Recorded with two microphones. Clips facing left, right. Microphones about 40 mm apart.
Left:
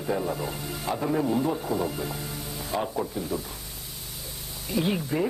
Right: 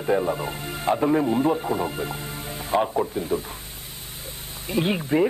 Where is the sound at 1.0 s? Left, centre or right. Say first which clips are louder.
Right 4 dB; right.